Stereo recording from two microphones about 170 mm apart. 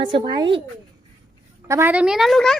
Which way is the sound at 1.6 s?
15° right (ahead or behind).